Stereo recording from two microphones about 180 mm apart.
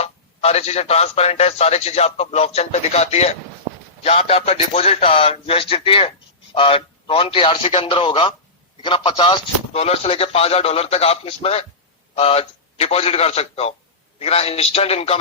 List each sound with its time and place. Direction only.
0.0 s speech: 35° left (ahead or behind)